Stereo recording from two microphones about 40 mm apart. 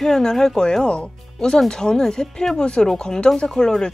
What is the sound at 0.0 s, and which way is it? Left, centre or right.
Speech, centre.